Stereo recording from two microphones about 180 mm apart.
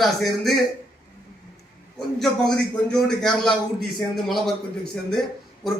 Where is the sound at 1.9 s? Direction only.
Centre (ahead or behind).